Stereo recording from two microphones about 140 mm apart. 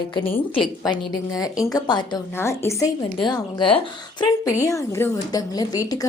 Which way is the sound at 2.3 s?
20° left (ahead or behind).